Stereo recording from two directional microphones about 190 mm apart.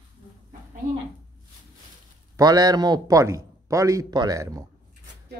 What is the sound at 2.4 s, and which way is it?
A man's voice, 20° right (ahead or behind).